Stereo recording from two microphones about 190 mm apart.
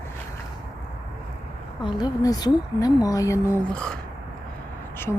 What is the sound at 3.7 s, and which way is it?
Speech, 5° left (ahead or behind).